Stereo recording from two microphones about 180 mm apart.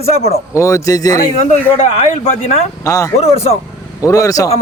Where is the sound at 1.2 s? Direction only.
40° left (ahead or behind).